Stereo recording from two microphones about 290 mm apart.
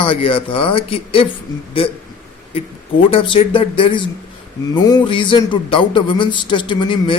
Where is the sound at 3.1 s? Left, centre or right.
Centre.